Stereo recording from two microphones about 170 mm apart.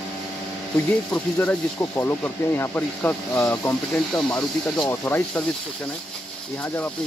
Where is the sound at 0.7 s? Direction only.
10° left (ahead or behind).